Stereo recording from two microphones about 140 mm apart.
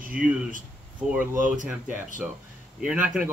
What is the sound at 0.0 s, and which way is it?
Speech, 80° right.